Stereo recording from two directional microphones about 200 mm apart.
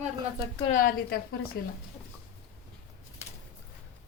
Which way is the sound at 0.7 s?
45° left (ahead or behind).